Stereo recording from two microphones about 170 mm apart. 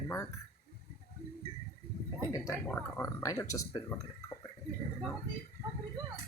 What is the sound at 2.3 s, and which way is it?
Speech, 15° left (ahead or behind).